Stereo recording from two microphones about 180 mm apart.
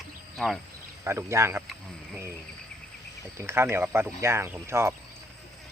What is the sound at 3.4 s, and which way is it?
Speech, 15° right (ahead or behind).